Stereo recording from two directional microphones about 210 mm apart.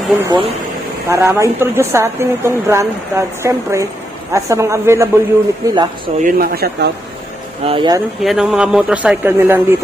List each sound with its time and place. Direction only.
0.2 s a woman's voice: 20° right (ahead or behind)
6.2 s speech: 45° right (ahead or behind)
7.6 s speech: 25° right (ahead or behind)
8.2 s a man's voice: centre (ahead or behind)